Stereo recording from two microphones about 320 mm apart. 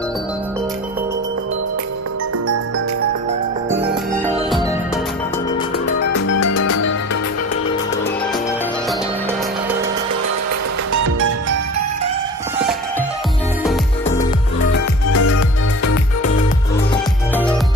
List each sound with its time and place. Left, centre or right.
3.9 s music: centre
5.9 s music: left
10.9 s music: right
14.7 s music: left
16.9 s music: centre